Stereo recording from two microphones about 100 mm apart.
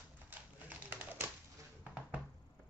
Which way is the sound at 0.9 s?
20° right (ahead or behind).